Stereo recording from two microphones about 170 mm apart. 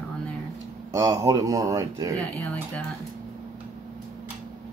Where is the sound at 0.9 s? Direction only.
20° right (ahead or behind).